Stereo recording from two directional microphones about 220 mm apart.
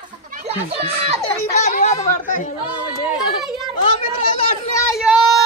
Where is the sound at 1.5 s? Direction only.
30° left (ahead or behind).